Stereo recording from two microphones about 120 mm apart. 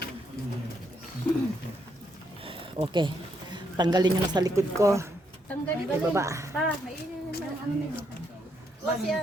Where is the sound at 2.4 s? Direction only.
50° right (ahead or behind).